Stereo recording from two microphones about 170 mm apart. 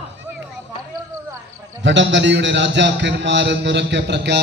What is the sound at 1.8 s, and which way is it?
A man's voice, 90° right.